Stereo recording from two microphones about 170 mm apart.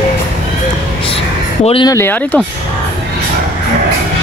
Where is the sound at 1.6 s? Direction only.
35° left (ahead or behind).